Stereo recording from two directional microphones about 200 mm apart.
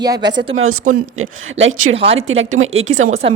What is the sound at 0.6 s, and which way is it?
Speech, 90° right.